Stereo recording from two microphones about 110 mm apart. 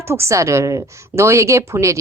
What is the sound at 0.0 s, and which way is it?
A woman's voice, 25° right (ahead or behind).